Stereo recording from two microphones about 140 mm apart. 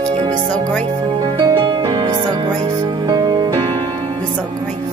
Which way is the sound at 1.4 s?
35° right (ahead or behind).